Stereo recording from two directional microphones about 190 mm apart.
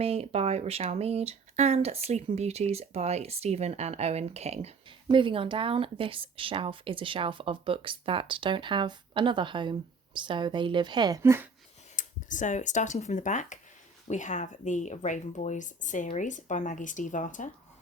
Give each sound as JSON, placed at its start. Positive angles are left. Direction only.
{"t": 0.0, "sound": "a woman's voice", "side_deg": -35}
{"t": 11.9, "sound": "speech", "side_deg": 40}